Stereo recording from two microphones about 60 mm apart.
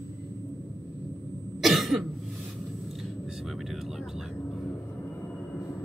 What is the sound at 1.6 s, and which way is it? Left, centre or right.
Cough, centre.